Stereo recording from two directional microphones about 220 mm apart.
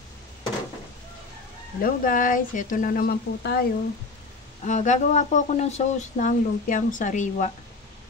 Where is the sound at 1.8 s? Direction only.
40° left (ahead or behind).